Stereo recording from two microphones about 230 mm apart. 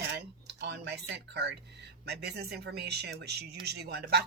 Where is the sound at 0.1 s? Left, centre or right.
Right.